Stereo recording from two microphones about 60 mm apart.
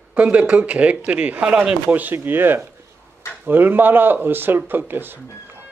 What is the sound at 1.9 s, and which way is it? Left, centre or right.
Speech, right.